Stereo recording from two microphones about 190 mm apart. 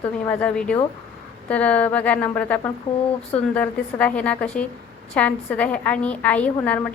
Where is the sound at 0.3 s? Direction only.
5° left (ahead or behind).